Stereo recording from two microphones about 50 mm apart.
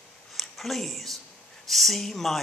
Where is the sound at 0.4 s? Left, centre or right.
Centre.